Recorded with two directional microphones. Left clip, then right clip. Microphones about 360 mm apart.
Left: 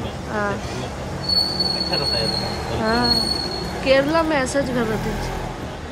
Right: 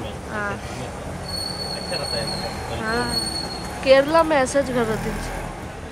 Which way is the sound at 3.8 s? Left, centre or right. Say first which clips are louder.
Right 2 dB; centre.